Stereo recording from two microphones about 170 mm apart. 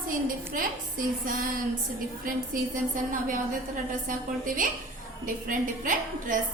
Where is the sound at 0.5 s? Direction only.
55° right (ahead or behind).